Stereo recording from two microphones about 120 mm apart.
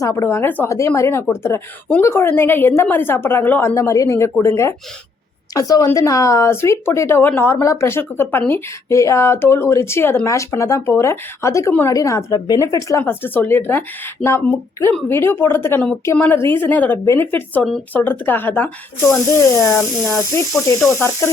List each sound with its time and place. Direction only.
0.0 s speech: 25° left (ahead or behind)
3.8 s speech: 25° left (ahead or behind)
13.1 s a woman's voice: 15° left (ahead or behind)
19.0 s speech: 25° left (ahead or behind)